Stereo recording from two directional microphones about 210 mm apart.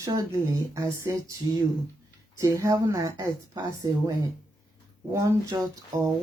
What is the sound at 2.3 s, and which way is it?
Speech, 15° right (ahead or behind).